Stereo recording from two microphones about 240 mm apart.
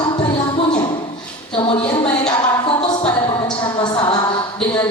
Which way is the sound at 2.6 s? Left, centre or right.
Centre.